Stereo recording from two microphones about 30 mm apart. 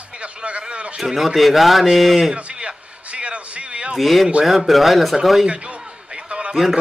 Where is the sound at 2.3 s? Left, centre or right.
Right.